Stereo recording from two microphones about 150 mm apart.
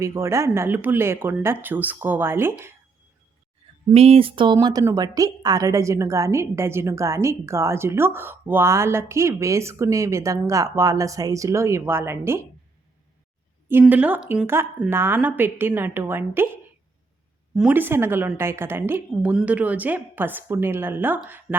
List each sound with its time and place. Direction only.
0.0 s a woman's voice: 20° right (ahead or behind)
3.8 s speech: 40° right (ahead or behind)
4.5 s a woman's voice: 25° right (ahead or behind)
13.7 s a woman's voice: 15° right (ahead or behind)
17.5 s a woman's voice: 5° right (ahead or behind)